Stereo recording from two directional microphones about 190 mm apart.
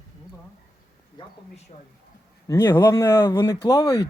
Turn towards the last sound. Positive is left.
turn(degrees=20)  # may be behind; listen again after turning